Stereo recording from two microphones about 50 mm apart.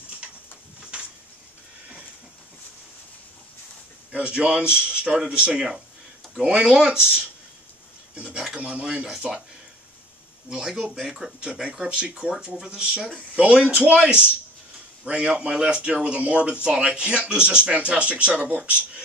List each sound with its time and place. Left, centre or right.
4.1 s speech: right
8.1 s dishes: right
8.5 s speech: right
10.5 s speech: centre; by 18.6 s right